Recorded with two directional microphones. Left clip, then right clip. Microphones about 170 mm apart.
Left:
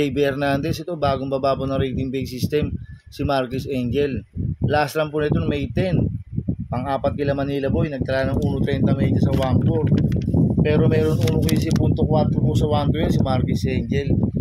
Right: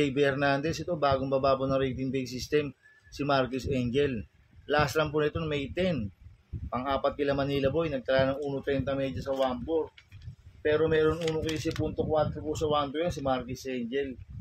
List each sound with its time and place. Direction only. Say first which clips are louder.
0.0 s speech: left 6 dB; 55° left (ahead or behind)